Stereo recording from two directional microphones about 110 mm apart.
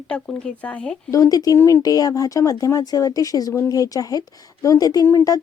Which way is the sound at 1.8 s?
35° left (ahead or behind).